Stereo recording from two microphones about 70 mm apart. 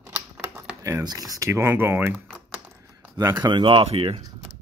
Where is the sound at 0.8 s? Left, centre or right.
Right.